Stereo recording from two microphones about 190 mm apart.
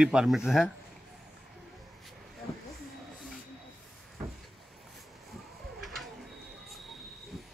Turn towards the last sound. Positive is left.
turn(degrees=0)  # may be behind; listen again after turning